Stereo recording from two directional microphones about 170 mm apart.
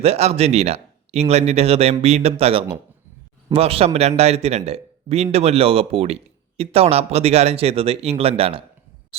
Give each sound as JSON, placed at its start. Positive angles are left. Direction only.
{"t": 0.0, "sound": "speech", "side_deg": -40}